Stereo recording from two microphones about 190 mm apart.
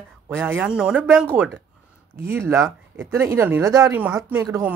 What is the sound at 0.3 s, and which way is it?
Speech, 10° right (ahead or behind).